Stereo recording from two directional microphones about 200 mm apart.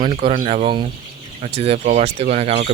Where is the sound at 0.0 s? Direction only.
25° right (ahead or behind).